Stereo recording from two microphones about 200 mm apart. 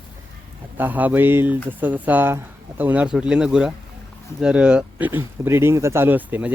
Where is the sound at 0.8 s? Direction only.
10° right (ahead or behind).